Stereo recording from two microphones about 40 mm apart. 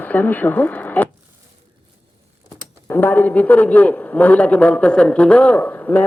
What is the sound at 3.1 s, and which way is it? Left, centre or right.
A man's voice, left.